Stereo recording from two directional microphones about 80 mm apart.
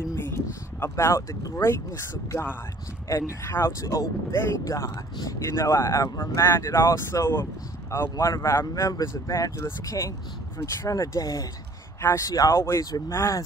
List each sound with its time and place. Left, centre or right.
0.2 s speech: left
3.1 s speech: left
4.9 s speech: left
5.5 s speech: left